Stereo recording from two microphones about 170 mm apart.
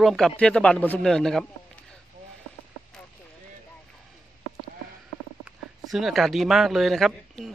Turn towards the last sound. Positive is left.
turn(degrees=0)  # may be behind; listen again after turning